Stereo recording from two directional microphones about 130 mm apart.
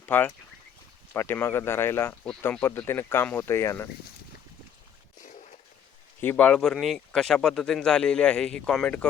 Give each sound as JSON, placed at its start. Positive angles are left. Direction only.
{"t": 0.0, "sound": "speech", "side_deg": 15}
{"t": 5.2, "sound": "a sound", "side_deg": 75}
{"t": 6.2, "sound": "speech", "side_deg": 10}